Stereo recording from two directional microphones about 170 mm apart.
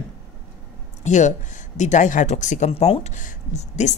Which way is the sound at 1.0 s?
45° left (ahead or behind).